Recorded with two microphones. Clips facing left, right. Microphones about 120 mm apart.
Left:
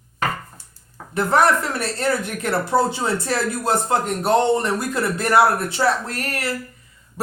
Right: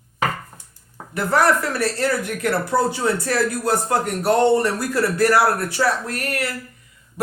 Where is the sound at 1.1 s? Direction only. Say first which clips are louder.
Left 1 dB; 25° left (ahead or behind).